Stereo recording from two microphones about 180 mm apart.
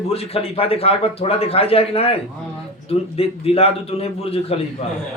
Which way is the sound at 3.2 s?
30° left (ahead or behind).